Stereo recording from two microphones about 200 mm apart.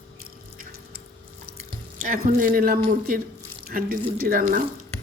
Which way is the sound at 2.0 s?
45° right (ahead or behind).